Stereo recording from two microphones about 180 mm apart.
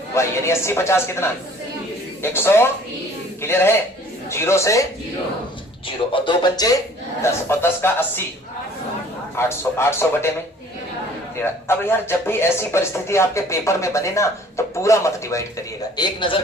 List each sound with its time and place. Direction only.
0.1 s speech: 15° left (ahead or behind)
6.1 s speech: 25° left (ahead or behind); by 8.2 s 10° left (ahead or behind)
9.3 s speech: 15° left (ahead or behind)
11.4 s speech: 15° left (ahead or behind)